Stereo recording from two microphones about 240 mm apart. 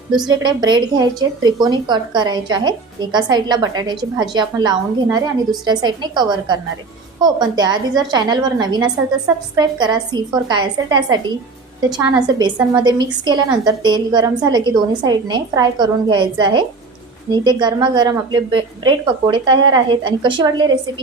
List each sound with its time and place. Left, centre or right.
0.2 s a woman's voice: centre